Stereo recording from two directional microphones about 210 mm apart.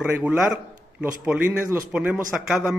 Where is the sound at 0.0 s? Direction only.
5° right (ahead or behind).